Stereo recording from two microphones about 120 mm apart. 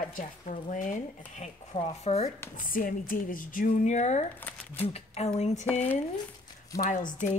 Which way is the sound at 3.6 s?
80° left.